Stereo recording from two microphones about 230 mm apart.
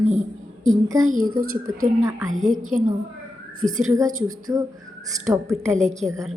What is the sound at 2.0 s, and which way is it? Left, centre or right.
Speech, centre.